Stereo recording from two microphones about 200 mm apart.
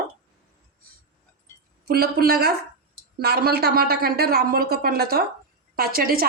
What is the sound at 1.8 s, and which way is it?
Speech, 50° right (ahead or behind).